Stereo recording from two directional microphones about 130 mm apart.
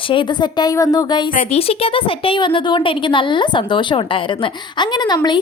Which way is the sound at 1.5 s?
50° left (ahead or behind).